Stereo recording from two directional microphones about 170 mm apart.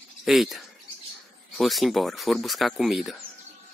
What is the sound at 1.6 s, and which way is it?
Speech, centre (ahead or behind).